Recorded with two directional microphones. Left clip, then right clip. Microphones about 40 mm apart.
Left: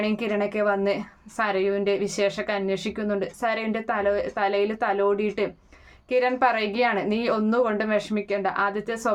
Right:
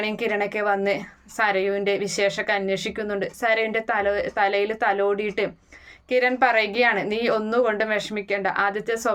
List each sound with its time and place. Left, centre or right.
0.1 s speech: left